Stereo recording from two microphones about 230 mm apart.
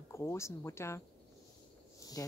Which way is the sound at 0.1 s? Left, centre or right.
Centre.